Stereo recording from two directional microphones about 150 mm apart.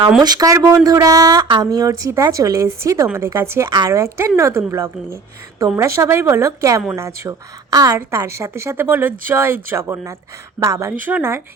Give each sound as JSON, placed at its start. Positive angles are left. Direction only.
{"t": 0.2, "sound": "a woman's voice", "side_deg": -25}